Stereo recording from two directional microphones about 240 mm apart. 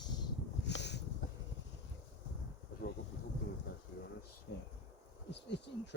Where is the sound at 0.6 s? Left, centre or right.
Left.